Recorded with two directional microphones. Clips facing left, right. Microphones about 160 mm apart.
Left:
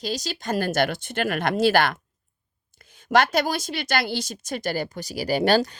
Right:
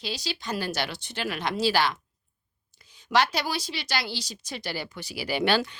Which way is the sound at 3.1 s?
50° left (ahead or behind).